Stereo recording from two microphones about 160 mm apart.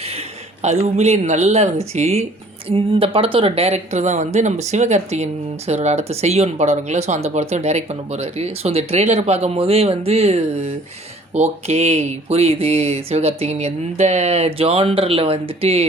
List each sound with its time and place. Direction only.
0.6 s speech: 45° right (ahead or behind)